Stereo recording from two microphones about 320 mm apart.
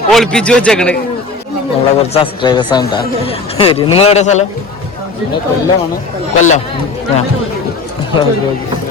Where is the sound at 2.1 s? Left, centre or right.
Centre.